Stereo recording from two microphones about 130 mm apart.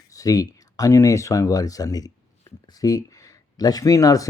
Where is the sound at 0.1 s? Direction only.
25° left (ahead or behind).